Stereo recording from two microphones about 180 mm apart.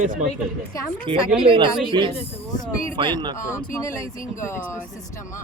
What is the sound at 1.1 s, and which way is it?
Speech, 30° right (ahead or behind).